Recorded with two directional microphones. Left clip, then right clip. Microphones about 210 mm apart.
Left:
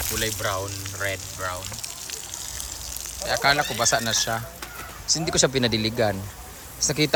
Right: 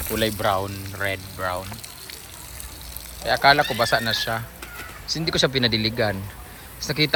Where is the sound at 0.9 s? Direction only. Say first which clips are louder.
Right 2 dB; centre (ahead or behind).